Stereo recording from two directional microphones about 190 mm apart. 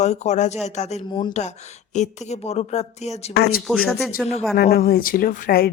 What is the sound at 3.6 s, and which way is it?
Speech, centre (ahead or behind).